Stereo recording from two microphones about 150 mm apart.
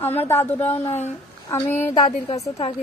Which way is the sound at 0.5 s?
15° left (ahead or behind).